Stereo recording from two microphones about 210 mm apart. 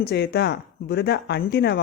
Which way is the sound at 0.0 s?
50° left (ahead or behind).